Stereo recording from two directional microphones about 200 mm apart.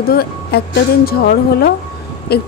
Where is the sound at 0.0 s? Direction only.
50° left (ahead or behind).